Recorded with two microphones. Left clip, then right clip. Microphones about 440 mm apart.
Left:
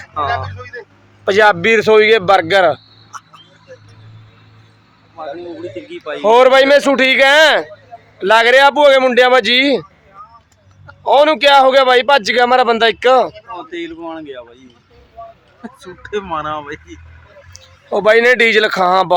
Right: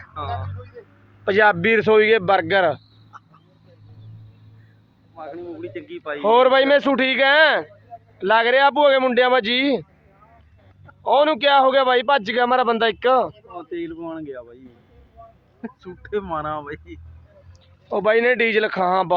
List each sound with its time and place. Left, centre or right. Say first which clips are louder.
1.2 s a man's voice: left 6 dB; right
5.9 s a man's voice: left 6 dB; right
11.0 s a man's voice: left 7 dB; right
13.5 s speech: left 5 dB; right
15.6 s speech: left 4 dB; right
17.5 s a man's voice: left 7 dB; right